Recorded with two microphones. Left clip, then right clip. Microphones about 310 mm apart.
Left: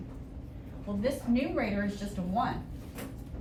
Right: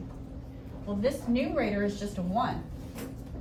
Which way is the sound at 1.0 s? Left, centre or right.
Centre.